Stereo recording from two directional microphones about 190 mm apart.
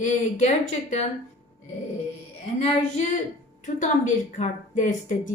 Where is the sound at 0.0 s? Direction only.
40° left (ahead or behind).